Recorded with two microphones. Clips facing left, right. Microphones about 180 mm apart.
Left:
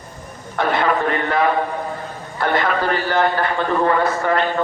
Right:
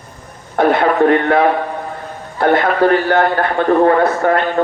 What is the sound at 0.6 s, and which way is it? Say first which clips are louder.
Radio: right 8 dB; 50° right (ahead or behind).